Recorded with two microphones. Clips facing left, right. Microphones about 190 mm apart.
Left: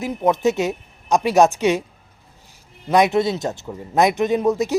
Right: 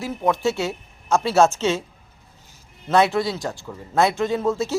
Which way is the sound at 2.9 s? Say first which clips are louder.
Left 2 dB; 20° left (ahead or behind).